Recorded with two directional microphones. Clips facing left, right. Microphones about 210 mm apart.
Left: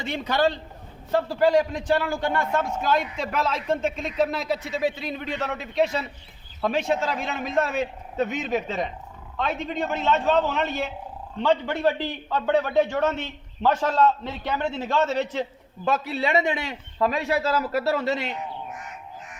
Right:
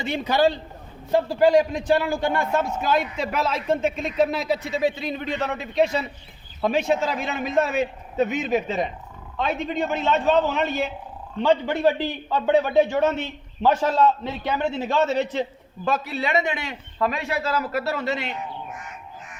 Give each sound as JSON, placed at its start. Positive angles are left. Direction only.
{"t": 0.0, "sound": "a man's voice", "side_deg": -10}
{"t": 15.8, "sound": "a man's voice", "side_deg": 25}